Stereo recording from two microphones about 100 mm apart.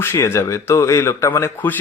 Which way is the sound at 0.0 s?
25° left (ahead or behind).